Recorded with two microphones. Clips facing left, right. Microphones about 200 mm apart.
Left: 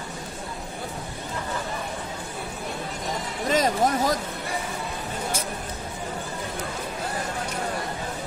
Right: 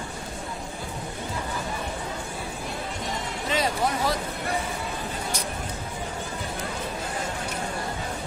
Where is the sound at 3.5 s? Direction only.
45° left (ahead or behind).